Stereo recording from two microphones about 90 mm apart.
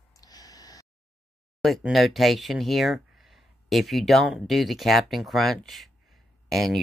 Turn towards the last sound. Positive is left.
turn(degrees=0)  # may be behind; listen again after turning